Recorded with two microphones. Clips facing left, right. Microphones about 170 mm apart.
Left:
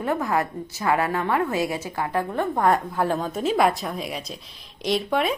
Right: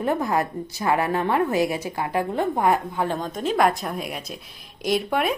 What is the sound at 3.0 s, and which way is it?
A woman's voice, centre (ahead or behind).